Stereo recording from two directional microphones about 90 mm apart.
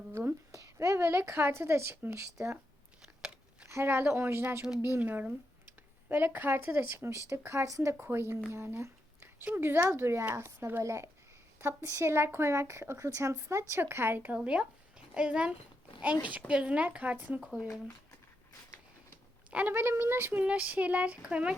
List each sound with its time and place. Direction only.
0.5 s a woman's voice: 35° right (ahead or behind)
3.2 s a sound: 10° right (ahead or behind)
3.7 s speech: 30° right (ahead or behind)
17.4 s speech: 5° right (ahead or behind)
19.5 s speech: 20° right (ahead or behind)
20.4 s speech: 15° right (ahead or behind)